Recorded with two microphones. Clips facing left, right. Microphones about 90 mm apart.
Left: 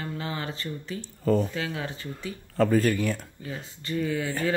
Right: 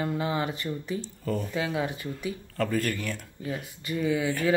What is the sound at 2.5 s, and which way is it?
Speech, 30° left (ahead or behind).